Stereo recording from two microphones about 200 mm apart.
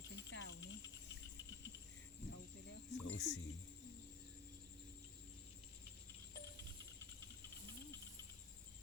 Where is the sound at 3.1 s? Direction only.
60° left (ahead or behind).